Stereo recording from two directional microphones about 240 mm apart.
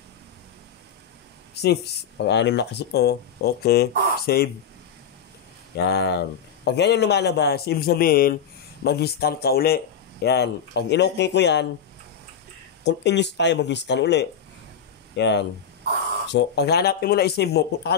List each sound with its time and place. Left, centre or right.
1.5 s a man's voice: left
5.8 s a man's voice: left
12.8 s a man's voice: left